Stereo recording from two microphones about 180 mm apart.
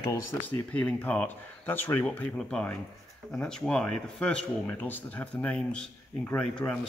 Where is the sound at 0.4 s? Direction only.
5° left (ahead or behind).